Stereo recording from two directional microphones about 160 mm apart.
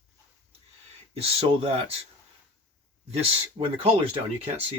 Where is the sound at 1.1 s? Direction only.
35° right (ahead or behind).